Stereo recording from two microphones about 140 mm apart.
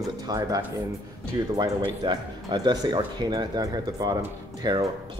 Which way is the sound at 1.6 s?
30° right (ahead or behind).